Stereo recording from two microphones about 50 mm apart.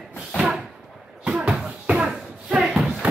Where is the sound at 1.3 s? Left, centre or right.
Right.